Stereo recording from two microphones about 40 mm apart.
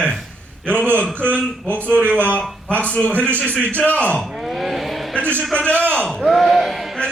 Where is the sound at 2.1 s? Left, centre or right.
Right.